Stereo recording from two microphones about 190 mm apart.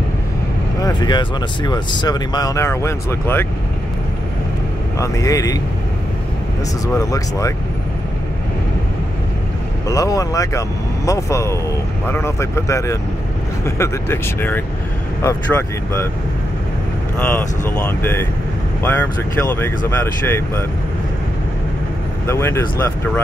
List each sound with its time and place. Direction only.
0.8 s speech: 20° left (ahead or behind)
4.9 s speech: 15° left (ahead or behind)
7.0 s speech: 15° left (ahead or behind)
9.8 s speech: 15° left (ahead or behind)
17.2 s speech: 10° left (ahead or behind)
22.2 s speech: 15° left (ahead or behind)